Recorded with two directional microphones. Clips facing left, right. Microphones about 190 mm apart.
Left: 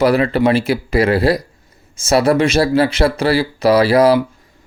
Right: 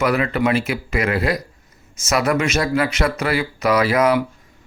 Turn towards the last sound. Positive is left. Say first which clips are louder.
# left 5 dB
turn(degrees=35)  # may be behind; listen again after turning